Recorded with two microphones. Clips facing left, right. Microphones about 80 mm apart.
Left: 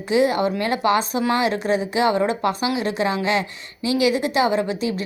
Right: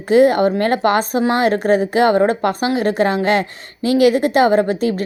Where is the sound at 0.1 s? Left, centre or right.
Right.